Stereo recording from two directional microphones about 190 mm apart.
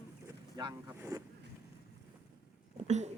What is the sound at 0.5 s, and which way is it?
Speech, 20° right (ahead or behind).